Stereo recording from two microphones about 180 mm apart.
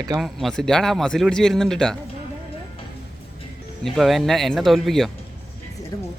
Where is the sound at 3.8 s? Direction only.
Centre (ahead or behind).